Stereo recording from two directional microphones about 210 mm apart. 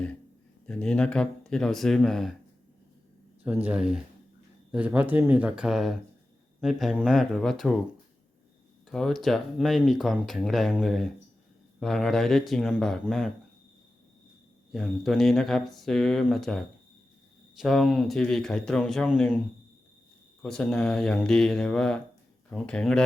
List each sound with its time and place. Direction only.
0.7 s speech: 5° left (ahead or behind)
3.4 s speech: 5° right (ahead or behind)
8.9 s speech: centre (ahead or behind)
14.7 s speech: centre (ahead or behind)
20.4 s speech: 5° left (ahead or behind)